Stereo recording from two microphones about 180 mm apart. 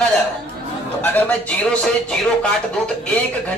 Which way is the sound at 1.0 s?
10° left (ahead or behind).